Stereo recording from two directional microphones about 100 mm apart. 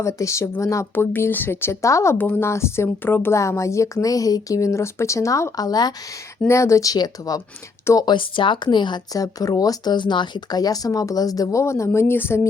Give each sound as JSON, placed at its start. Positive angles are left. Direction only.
{"t": 0.0, "sound": "speech", "side_deg": 30}
{"t": 2.1, "sound": "speech", "side_deg": 20}
{"t": 6.5, "sound": "speech", "side_deg": 30}
{"t": 8.0, "sound": "speech", "side_deg": 55}
{"t": 9.1, "sound": "speech", "side_deg": 35}